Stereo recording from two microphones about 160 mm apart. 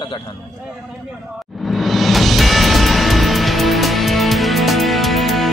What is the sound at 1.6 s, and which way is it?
Music, centre (ahead or behind).